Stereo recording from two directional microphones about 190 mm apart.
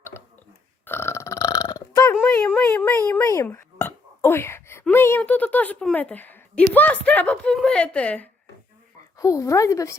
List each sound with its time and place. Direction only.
0.9 s burping: 10° left (ahead or behind)
2.1 s speech: 5° left (ahead or behind)